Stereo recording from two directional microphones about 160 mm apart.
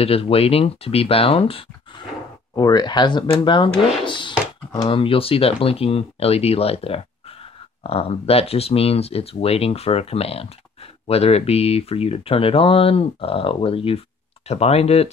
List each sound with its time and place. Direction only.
0.0 s speech: 35° left (ahead or behind)
2.5 s speech: 25° left (ahead or behind); by 15.0 s 40° left (ahead or behind)